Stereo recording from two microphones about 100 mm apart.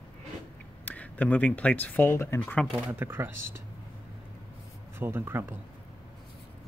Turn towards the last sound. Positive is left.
turn(degrees=-25)  # may be behind; listen again after turning